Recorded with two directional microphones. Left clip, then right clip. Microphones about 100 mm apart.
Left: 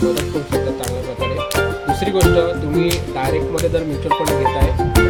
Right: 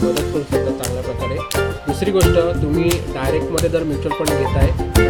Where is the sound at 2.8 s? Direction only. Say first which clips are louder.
Even; centre (ahead or behind).